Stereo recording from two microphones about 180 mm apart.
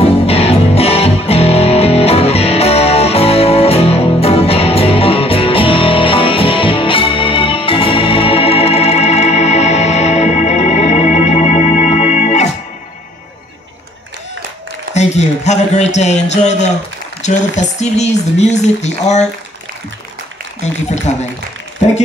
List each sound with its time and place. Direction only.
0.0 s music: 35° left (ahead or behind)
15.0 s a man's voice: 40° left (ahead or behind)
20.6 s speech: 40° left (ahead or behind)